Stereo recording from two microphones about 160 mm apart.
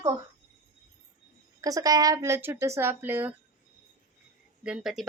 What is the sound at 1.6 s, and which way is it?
Speech, 20° right (ahead or behind).